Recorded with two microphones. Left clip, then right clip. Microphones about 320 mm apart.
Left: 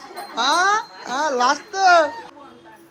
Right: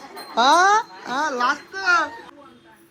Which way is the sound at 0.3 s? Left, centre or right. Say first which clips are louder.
Right 3 dB; centre.